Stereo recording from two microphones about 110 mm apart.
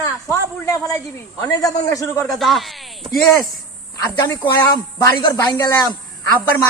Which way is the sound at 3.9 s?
30° left (ahead or behind).